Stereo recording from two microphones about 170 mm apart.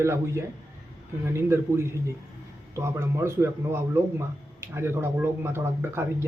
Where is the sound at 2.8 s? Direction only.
15° right (ahead or behind).